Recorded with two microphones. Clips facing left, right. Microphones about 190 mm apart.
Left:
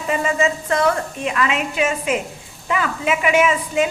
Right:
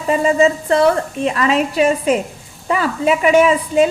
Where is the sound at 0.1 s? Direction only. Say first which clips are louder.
Right 6 dB; 35° right (ahead or behind).